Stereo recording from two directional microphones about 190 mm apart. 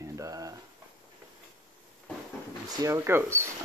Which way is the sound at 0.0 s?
15° right (ahead or behind).